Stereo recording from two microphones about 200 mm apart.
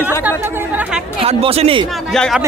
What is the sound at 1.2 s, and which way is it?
Speech, 30° right (ahead or behind).